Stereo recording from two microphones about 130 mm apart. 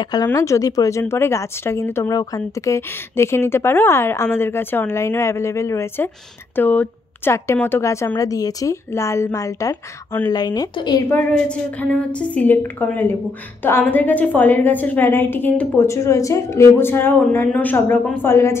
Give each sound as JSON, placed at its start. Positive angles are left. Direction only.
{"t": 0.0, "sound": "a woman's voice", "side_deg": 30}
{"t": 11.1, "sound": "a woman's voice", "side_deg": 10}